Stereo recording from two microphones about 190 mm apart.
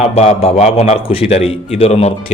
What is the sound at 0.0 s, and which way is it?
A man's voice, 35° left (ahead or behind).